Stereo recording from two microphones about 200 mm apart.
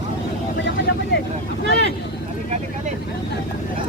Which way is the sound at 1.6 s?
55° left (ahead or behind).